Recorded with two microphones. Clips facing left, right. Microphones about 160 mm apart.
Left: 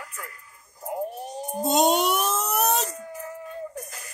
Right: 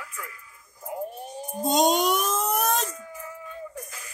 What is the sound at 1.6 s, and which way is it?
Speech, 5° left (ahead or behind).